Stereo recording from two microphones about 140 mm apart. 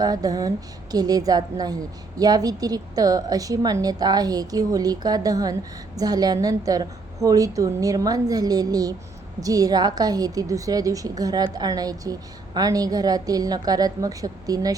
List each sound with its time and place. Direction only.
0.0 s a woman's voice: 25° right (ahead or behind)